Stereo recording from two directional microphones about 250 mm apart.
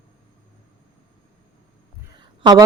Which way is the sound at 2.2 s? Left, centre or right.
Centre.